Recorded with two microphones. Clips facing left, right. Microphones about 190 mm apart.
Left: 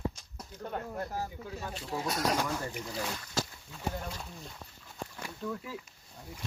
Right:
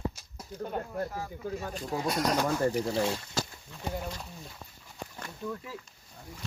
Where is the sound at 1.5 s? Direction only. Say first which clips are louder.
Right 5 dB; 45° right (ahead or behind).